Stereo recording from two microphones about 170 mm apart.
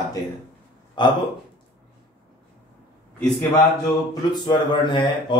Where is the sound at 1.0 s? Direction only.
25° left (ahead or behind).